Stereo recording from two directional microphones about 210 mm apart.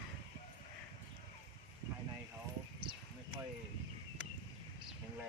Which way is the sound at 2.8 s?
25° right (ahead or behind).